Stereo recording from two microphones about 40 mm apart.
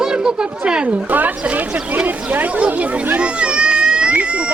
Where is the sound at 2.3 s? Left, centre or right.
Right.